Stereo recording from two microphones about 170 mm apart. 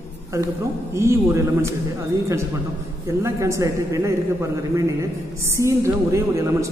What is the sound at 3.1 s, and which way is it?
A woman's voice, 15° right (ahead or behind).